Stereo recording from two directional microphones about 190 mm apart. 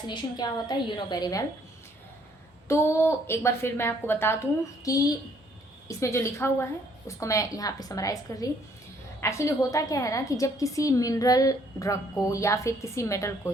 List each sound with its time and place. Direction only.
0.1 s a woman's voice: 25° left (ahead or behind)
2.6 s a woman's voice: 15° left (ahead or behind)